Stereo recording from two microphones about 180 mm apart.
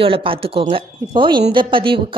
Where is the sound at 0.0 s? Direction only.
30° right (ahead or behind).